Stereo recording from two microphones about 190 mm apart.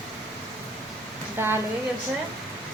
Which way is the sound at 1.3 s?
10° right (ahead or behind).